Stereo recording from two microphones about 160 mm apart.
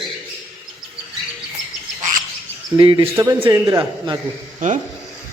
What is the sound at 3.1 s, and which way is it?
A man's voice, 20° right (ahead or behind).